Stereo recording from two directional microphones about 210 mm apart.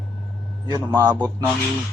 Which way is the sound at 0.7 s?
20° right (ahead or behind).